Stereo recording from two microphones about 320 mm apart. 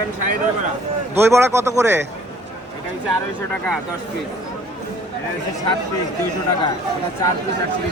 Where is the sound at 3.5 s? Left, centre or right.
Centre.